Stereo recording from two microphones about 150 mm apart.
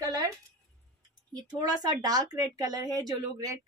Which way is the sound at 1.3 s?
25° right (ahead or behind).